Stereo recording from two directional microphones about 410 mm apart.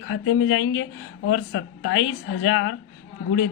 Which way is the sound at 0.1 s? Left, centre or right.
Left.